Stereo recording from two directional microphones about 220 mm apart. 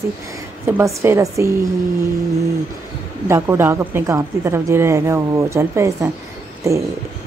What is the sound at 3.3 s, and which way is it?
A woman's voice, 10° right (ahead or behind).